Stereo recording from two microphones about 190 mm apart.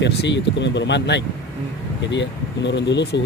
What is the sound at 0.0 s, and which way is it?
Speech, 70° left (ahead or behind).